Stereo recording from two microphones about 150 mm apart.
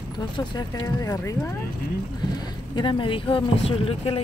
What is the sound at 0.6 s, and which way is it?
Speech, 20° left (ahead or behind).